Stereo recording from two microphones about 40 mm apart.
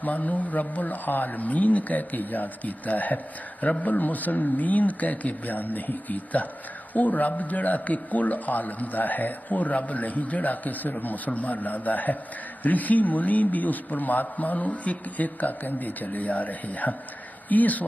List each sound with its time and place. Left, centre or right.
0.0 s a man's voice: left